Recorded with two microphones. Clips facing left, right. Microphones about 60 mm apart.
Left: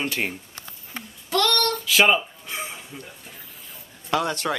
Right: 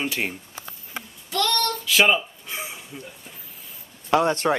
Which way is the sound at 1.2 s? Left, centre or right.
Left.